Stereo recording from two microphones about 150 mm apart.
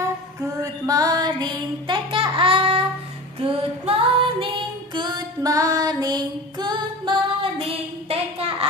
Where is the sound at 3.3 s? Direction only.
40° right (ahead or behind).